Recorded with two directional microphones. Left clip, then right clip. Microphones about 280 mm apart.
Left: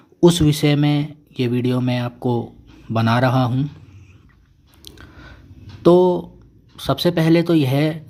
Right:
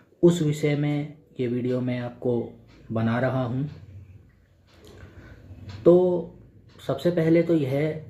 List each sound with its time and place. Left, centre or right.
0.2 s speech: left
5.8 s speech: left